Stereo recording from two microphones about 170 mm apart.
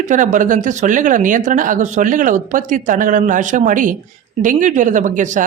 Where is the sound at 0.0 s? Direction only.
50° right (ahead or behind).